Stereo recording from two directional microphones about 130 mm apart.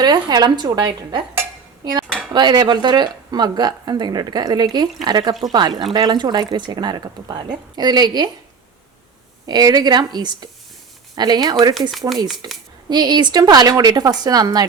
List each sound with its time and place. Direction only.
0.0 s speech: 35° right (ahead or behind)
9.5 s speech: 30° right (ahead or behind)
11.7 s speech: centre (ahead or behind)
12.4 s speech: 30° right (ahead or behind)